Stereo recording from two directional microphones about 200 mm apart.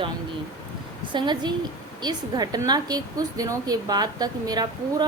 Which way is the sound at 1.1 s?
20° right (ahead or behind).